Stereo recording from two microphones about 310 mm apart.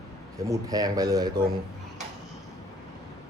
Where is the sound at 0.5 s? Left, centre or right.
Centre.